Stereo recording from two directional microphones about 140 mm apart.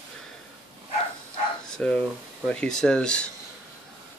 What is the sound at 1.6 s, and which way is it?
Bow-wow, 5° left (ahead or behind).